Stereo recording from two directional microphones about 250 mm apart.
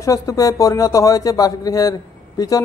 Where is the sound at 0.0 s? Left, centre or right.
Centre.